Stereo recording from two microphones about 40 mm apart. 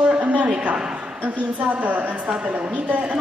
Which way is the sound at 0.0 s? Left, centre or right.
Right.